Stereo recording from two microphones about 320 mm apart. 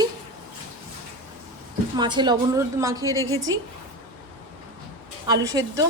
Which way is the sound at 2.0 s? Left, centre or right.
Centre.